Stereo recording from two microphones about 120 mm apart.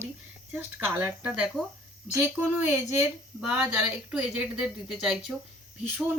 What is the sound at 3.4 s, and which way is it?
A woman's voice, 5° right (ahead or behind).